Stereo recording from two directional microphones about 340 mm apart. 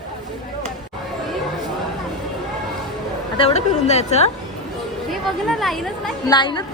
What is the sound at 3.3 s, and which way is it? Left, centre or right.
Speech, centre.